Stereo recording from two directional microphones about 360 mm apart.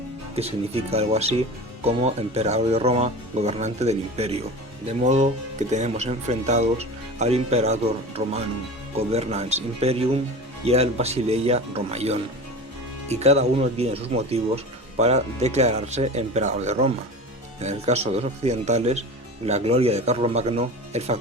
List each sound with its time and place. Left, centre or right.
0.3 s speech: centre